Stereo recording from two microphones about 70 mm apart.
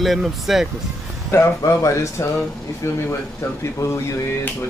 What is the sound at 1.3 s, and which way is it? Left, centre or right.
Speech, left.